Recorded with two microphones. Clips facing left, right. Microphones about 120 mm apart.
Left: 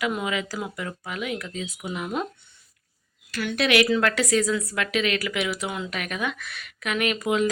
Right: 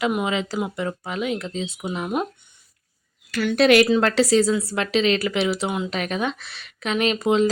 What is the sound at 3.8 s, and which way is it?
Speech, 30° right (ahead or behind).